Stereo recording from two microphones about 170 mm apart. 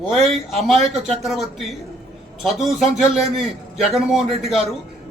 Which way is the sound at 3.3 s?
Centre (ahead or behind).